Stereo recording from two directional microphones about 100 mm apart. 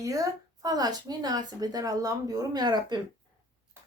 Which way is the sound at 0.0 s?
35° right (ahead or behind).